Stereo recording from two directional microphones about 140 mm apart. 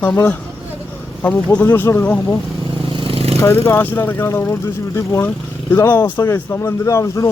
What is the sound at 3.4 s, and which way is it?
A man's voice, 20° left (ahead or behind).